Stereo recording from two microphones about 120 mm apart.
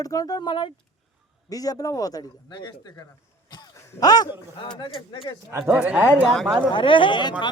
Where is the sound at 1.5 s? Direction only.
30° left (ahead or behind).